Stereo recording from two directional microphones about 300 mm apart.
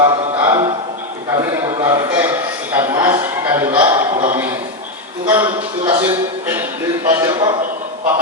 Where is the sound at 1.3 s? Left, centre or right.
Centre.